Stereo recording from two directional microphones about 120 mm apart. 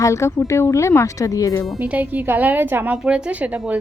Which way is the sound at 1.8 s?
15° right (ahead or behind).